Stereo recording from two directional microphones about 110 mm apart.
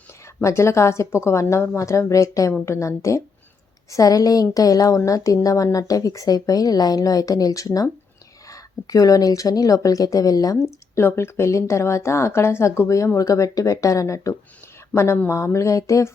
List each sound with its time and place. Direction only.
0.4 s a woman's voice: 25° left (ahead or behind)
10.9 s a woman's voice: 20° left (ahead or behind)